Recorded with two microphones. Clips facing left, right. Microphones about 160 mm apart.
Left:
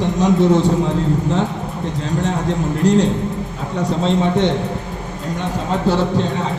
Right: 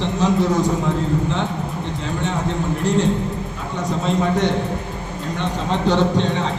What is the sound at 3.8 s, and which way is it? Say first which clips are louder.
Speech: left 3 dB; 30° left (ahead or behind).